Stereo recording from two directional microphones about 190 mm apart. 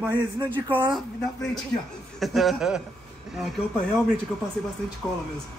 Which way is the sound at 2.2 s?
Centre (ahead or behind).